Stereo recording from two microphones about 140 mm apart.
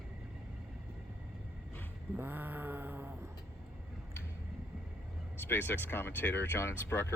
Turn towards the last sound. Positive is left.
turn(degrees=15)  # may be behind; listen again after turning